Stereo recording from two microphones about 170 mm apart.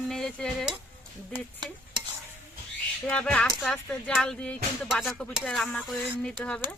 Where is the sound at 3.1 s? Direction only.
5° left (ahead or behind).